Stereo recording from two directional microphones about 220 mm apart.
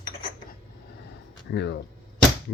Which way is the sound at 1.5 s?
50° left (ahead or behind).